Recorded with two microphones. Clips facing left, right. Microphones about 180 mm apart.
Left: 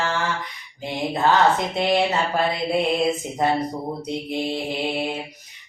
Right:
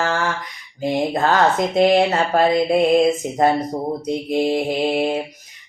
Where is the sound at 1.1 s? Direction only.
45° right (ahead or behind).